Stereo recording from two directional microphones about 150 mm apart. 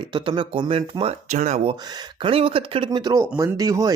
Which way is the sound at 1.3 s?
50° right (ahead or behind).